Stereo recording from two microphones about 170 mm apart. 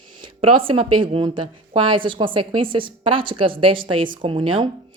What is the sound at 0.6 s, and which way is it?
A woman's voice, 35° right (ahead or behind).